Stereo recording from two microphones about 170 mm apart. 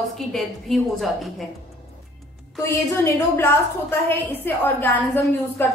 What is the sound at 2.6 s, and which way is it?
A woman's voice, 15° left (ahead or behind).